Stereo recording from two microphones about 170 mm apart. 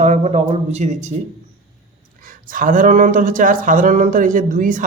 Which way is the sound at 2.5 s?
55° right (ahead or behind).